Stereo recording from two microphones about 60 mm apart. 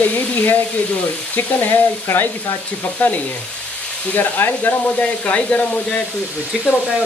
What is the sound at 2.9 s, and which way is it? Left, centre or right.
Frying, left.